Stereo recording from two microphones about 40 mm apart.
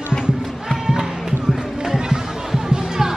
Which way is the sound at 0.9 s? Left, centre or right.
Centre.